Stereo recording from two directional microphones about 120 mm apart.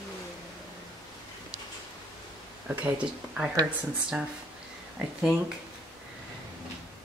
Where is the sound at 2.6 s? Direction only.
10° right (ahead or behind).